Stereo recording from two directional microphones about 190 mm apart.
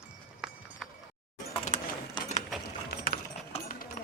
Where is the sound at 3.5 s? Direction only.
35° left (ahead or behind).